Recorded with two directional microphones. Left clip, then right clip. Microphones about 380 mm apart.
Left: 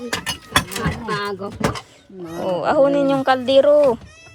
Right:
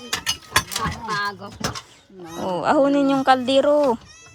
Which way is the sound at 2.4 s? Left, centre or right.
Centre.